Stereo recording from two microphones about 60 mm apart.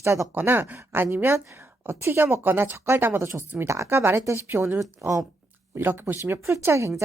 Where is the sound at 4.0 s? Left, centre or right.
Right.